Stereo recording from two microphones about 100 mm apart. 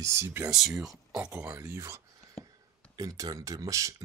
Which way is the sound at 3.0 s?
40° right (ahead or behind).